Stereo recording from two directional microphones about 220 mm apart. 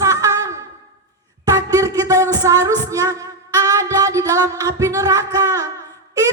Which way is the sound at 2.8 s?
15° right (ahead or behind).